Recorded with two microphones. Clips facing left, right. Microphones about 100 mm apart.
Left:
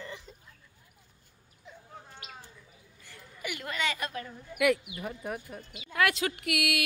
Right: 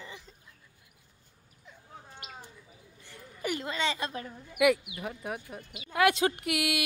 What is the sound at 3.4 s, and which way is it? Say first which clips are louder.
Speech: right 5 dB; 35° right (ahead or behind).